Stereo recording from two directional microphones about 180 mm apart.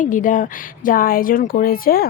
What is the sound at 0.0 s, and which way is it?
Speech, 45° left (ahead or behind).